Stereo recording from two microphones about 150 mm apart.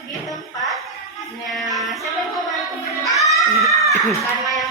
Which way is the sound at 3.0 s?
20° left (ahead or behind).